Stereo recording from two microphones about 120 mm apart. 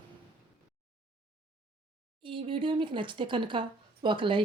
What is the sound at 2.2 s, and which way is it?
Speech, 45° right (ahead or behind).